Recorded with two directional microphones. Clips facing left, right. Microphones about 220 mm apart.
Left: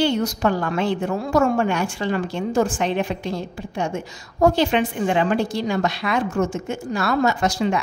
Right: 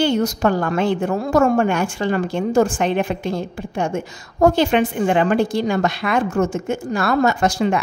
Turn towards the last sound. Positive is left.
turn(degrees=-50)  # may be behind; listen again after turning